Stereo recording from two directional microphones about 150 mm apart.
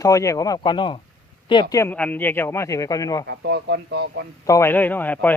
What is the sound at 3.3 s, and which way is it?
Speech, 90° right.